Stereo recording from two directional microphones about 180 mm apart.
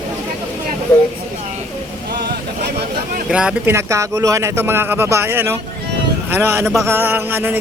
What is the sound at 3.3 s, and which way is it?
Speech, 5° right (ahead or behind).